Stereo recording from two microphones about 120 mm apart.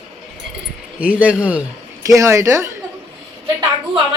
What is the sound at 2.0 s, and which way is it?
Speech, 25° right (ahead or behind).